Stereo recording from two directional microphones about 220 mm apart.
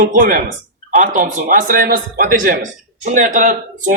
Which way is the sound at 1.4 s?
40° right (ahead or behind).